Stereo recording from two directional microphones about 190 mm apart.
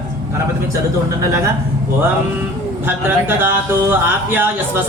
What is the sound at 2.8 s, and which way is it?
Speech, 10° right (ahead or behind).